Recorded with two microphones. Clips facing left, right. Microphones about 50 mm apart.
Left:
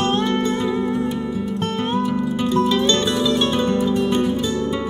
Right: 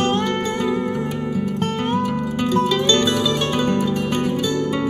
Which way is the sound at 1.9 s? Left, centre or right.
Right.